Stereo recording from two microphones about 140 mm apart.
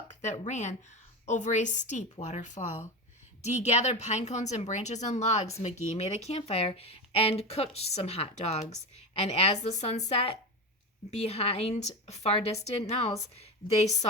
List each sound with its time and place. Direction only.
0.1 s a woman's voice: 55° left (ahead or behind)